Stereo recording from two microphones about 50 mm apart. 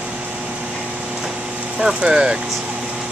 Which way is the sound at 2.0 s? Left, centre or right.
Right.